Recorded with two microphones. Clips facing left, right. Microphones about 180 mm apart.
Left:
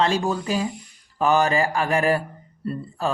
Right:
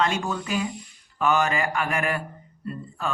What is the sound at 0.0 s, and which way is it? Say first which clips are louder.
Speech: left 4 dB; 30° left (ahead or behind).